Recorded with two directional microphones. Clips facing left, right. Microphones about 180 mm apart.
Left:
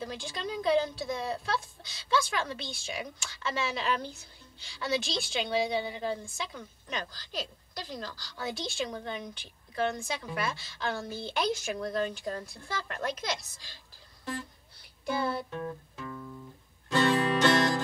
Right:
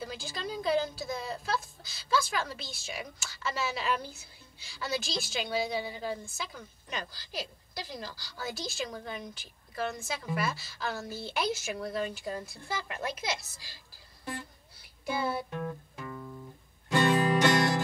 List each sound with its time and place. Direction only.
0.0 s speech: 5° right (ahead or behind)
15.0 s music: 5° right (ahead or behind)